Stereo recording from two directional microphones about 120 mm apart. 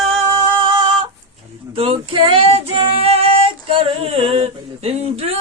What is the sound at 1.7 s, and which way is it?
Female singing, 50° right (ahead or behind).